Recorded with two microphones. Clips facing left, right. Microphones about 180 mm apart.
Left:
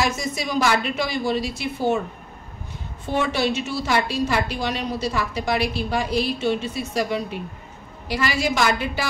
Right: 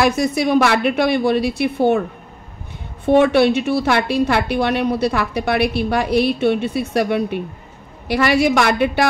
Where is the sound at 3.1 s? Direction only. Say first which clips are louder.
Right 10 dB; 60° right (ahead or behind).